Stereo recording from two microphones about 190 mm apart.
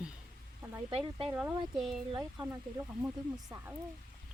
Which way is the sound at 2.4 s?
15° right (ahead or behind).